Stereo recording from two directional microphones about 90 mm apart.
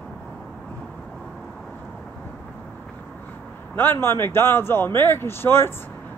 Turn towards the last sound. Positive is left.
turn(degrees=25)  # may be behind; listen again after turning